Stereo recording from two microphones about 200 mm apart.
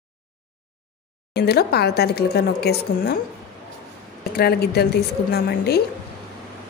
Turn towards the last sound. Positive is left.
turn(degrees=50)  # may be behind; listen again after turning